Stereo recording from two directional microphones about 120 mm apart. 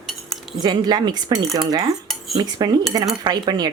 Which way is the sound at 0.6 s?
35° right (ahead or behind).